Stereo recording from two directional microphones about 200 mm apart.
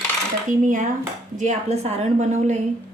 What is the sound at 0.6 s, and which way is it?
A woman's voice, 40° right (ahead or behind).